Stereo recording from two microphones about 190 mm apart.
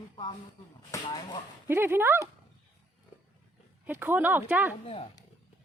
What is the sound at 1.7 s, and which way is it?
Speech, 10° right (ahead or behind).